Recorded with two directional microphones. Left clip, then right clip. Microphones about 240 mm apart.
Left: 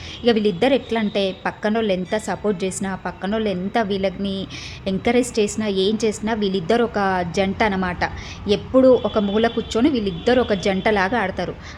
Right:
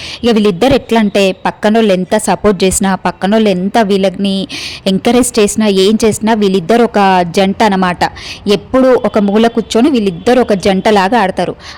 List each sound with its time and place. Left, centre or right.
0.2 s a woman's voice: right